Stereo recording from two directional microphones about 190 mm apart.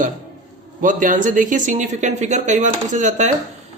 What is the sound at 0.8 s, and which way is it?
Speech, 45° right (ahead or behind).